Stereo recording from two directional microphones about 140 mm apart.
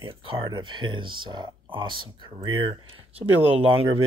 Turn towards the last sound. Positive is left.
turn(degrees=-45)  # may be behind; listen again after turning